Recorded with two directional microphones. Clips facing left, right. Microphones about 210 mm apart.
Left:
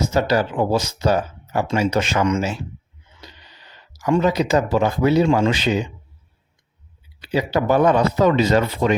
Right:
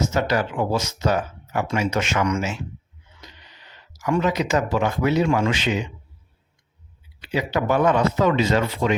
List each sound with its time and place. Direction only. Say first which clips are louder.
0.0 s speech: left 3 dB; 35° left (ahead or behind)
7.2 s speech: left 3 dB; 35° left (ahead or behind)